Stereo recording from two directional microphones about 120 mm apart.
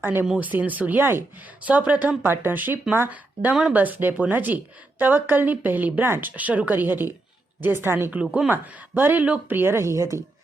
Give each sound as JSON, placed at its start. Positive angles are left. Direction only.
{"t": 0.0, "sound": "speech", "side_deg": -15}